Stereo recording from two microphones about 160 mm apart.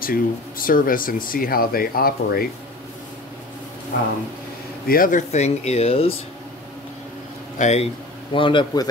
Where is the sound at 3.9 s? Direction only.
65° left (ahead or behind); by 6.1 s 35° left (ahead or behind).